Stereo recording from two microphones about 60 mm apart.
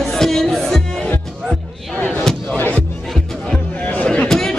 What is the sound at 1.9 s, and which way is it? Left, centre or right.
Slam, left.